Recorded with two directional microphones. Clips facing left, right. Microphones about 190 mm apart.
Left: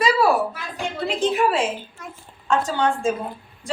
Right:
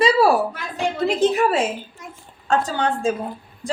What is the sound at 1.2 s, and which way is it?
A woman's voice, 40° right (ahead or behind).